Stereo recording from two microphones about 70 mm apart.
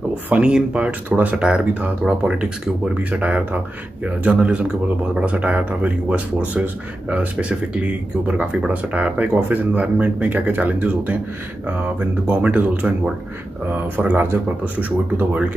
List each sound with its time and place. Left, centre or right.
0.4 s speech: centre